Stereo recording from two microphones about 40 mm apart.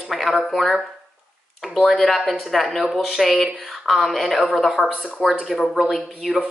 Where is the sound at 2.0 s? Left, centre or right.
Centre.